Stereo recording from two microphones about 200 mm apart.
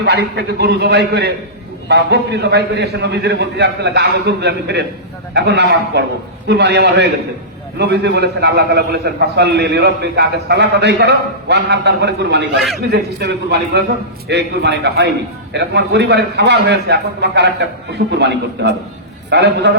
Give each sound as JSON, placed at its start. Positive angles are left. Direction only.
{"t": 0.0, "sound": "a man's voice", "side_deg": -55}